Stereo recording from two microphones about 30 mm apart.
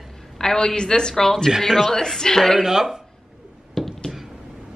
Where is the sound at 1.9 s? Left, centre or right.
Centre.